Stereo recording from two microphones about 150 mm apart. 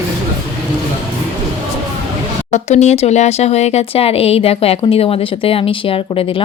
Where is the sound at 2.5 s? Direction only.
50° left (ahead or behind).